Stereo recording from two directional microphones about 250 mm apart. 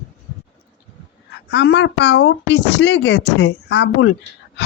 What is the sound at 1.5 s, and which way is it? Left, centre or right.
Speech, left.